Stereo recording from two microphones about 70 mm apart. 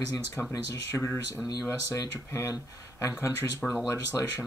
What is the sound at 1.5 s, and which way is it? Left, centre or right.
Speech, left.